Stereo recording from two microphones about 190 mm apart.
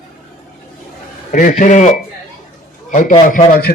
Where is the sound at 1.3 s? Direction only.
40° left (ahead or behind).